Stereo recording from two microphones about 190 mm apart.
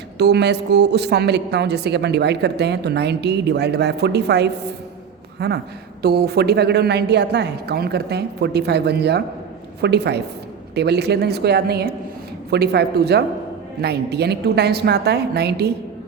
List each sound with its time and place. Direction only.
0.2 s a woman's voice: 60° right (ahead or behind)